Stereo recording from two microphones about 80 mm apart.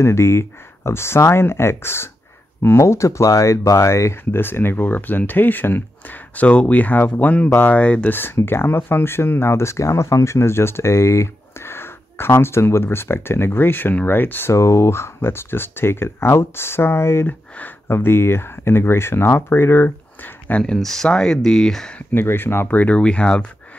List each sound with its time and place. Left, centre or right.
0.0 s speech: left
20.4 s speech: centre
22.1 s speech: left; by 23.4 s centre